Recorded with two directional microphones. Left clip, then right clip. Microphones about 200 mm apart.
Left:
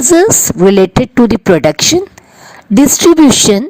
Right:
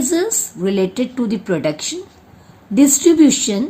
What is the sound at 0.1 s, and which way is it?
Speech, 50° left (ahead or behind).